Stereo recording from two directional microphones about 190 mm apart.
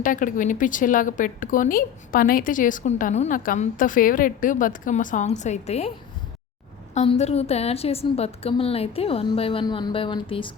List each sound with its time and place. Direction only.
0.0 s speech: 45° left (ahead or behind)
6.9 s a woman's voice: 35° left (ahead or behind)